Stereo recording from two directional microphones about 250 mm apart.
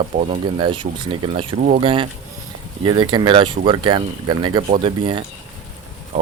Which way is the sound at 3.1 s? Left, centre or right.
Centre.